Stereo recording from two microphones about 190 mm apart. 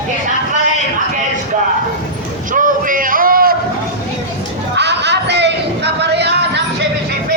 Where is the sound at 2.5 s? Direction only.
45° right (ahead or behind).